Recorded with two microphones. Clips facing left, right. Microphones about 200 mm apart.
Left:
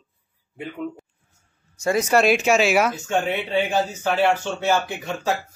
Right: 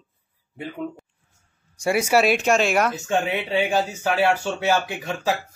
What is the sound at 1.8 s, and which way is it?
Speech, 10° right (ahead or behind).